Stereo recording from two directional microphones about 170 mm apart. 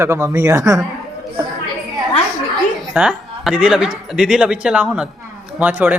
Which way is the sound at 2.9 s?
5° right (ahead or behind).